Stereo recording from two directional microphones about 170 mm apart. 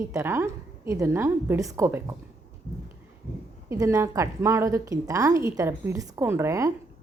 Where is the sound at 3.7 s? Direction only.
20° right (ahead or behind).